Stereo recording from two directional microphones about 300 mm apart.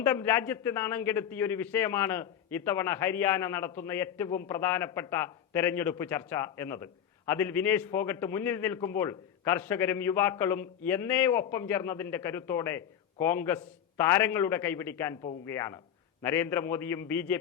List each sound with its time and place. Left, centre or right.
0.0 s a man's voice: centre